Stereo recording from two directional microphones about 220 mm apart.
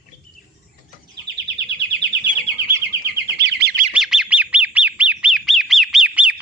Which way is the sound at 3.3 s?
50° right (ahead or behind).